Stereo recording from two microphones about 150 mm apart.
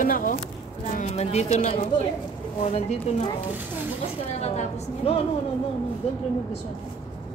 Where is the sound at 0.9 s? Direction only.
45° left (ahead or behind).